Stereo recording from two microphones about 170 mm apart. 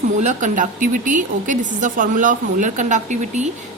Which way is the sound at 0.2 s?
45° right (ahead or behind).